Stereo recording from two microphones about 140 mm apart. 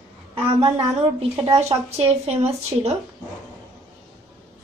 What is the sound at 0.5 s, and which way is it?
A woman's voice, 45° right (ahead or behind).